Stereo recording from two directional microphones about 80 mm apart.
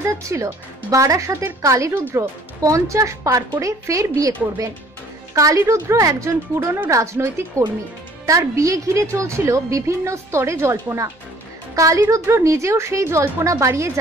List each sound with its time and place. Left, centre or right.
0.0 s a woman's voice: right
12.0 s a woman's voice: right